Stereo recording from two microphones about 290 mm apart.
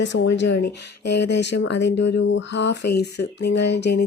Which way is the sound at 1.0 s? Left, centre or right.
Left.